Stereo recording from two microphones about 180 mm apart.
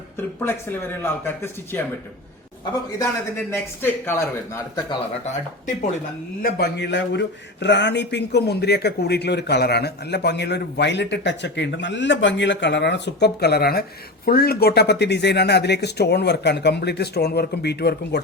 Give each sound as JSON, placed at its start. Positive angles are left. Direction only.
{"t": 0.2, "sound": "a man's voice", "side_deg": 10}
{"t": 3.0, "sound": "a man's voice", "side_deg": 15}
{"t": 6.4, "sound": "a man's voice", "side_deg": 65}